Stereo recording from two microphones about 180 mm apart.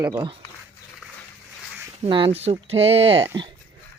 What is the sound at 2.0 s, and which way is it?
Speech, 30° right (ahead or behind).